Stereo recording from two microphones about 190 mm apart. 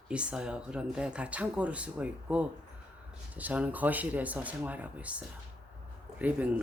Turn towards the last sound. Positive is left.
turn(degrees=-10)  # may be behind; listen again after turning